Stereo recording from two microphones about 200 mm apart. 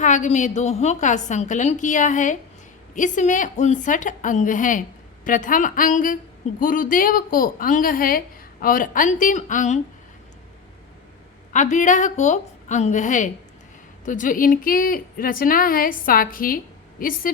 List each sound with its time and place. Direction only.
0.0 s a woman's voice: 40° left (ahead or behind)
11.5 s a woman's voice: 40° left (ahead or behind)